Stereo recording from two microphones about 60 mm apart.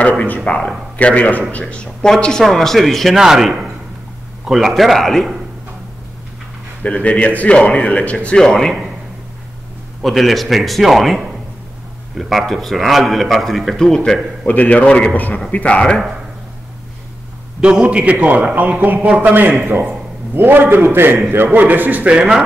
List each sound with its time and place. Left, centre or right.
0.4 s a man's voice: centre
6.8 s a man's voice: left
8.4 s a man's voice: centre
10.0 s a man's voice: centre
14.5 s a man's voice: left
15.1 s a man's voice: left
17.6 s a man's voice: centre